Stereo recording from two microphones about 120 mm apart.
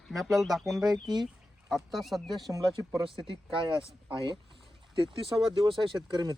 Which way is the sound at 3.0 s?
45° right (ahead or behind).